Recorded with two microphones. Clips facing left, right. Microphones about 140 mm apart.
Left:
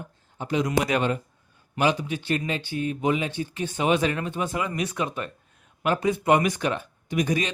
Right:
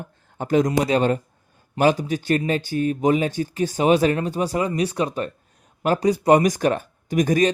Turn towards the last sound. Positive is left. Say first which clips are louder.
# right 7 dB
turn(degrees=-45)  # may be behind; listen again after turning